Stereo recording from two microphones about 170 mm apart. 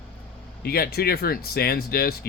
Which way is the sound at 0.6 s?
65° left (ahead or behind).